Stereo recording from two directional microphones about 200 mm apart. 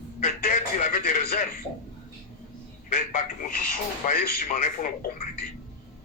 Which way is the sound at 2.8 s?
40° left (ahead or behind).